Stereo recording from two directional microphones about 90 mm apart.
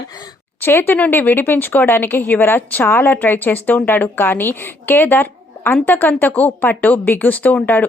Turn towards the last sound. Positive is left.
turn(degrees=20)  # may be behind; listen again after turning